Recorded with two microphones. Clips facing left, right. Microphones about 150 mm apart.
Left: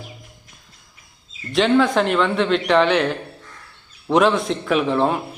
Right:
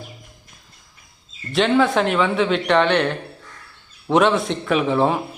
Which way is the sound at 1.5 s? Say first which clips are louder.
Left 1 dB; centre (ahead or behind).